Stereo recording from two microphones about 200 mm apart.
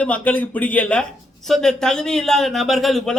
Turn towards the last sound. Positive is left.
turn(degrees=0)  # may be behind; listen again after turning